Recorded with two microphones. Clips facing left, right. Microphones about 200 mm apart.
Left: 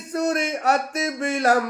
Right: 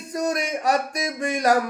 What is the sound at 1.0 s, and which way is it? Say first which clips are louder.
Speech: left 1 dB; 15° right (ahead or behind).